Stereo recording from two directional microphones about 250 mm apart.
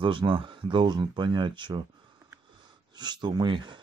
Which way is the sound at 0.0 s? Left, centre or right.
Centre.